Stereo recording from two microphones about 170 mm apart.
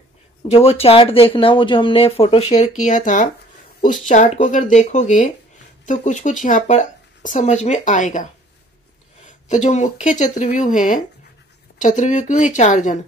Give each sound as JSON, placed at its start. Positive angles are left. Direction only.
{"t": 0.4, "sound": "speech", "side_deg": 35}
{"t": 9.5, "sound": "speech", "side_deg": 45}